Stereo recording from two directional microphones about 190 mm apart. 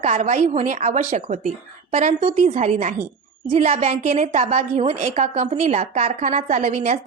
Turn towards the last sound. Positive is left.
turn(degrees=-40)  # may be behind; listen again after turning